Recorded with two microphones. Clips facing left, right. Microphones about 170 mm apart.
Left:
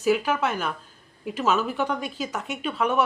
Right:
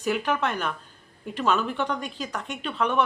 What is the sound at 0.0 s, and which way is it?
Speech, 5° left (ahead or behind).